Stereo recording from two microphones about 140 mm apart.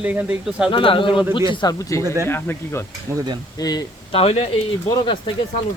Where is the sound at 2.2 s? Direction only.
15° left (ahead or behind).